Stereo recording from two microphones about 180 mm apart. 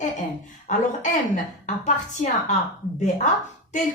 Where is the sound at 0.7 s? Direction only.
45° left (ahead or behind).